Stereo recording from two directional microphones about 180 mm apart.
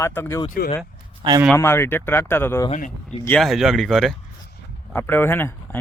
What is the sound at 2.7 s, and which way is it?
Speech, 45° left (ahead or behind).